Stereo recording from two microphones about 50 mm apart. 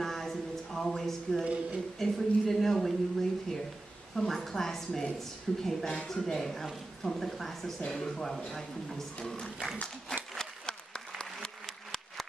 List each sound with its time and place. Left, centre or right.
0.0 s a sound: centre
1.4 s speech: right
2.0 s speech: centre
10.3 s applause: centre